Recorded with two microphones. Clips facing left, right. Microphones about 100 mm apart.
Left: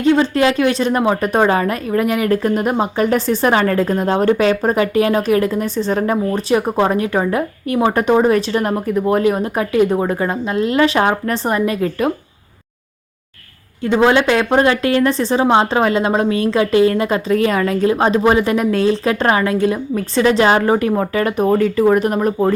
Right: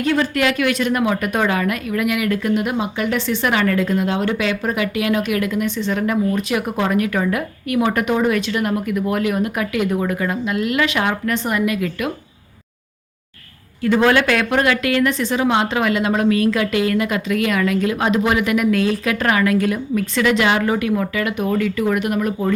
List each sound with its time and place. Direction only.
0.0 s a woman's voice: 25° left (ahead or behind)
13.8 s a woman's voice: 25° left (ahead or behind)